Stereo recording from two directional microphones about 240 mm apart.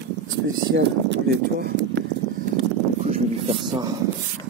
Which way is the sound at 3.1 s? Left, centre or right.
Right.